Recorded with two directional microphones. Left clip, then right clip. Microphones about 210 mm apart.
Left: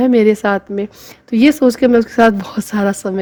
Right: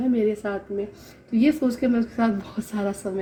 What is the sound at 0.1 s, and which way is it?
A woman's voice, 45° left (ahead or behind).